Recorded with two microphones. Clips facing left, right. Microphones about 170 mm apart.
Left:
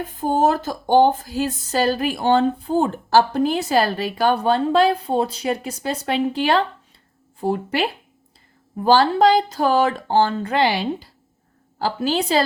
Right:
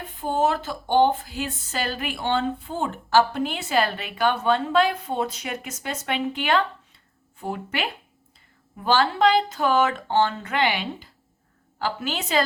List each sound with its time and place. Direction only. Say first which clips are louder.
0.2 s speech: left 4 dB; 40° left (ahead or behind)